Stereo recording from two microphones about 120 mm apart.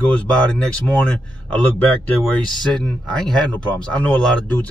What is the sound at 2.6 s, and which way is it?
Speech, 5° left (ahead or behind).